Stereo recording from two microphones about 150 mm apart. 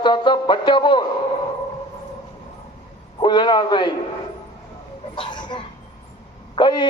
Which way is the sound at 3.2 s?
30° left (ahead or behind).